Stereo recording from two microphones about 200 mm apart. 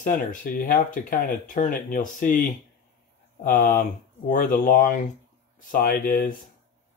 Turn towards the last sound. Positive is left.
turn(degrees=45)  # may be behind; listen again after turning